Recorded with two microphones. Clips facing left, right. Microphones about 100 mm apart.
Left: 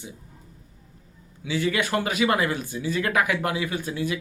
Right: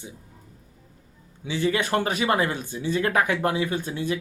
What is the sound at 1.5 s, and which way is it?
A man's voice, 30° right (ahead or behind).